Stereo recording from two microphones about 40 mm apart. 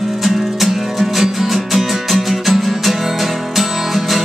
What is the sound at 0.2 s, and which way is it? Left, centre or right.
Music, centre.